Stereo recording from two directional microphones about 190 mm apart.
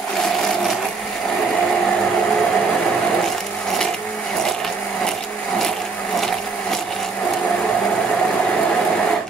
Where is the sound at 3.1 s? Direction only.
Centre (ahead or behind).